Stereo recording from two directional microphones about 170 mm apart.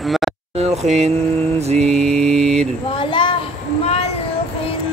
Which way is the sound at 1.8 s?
5° left (ahead or behind).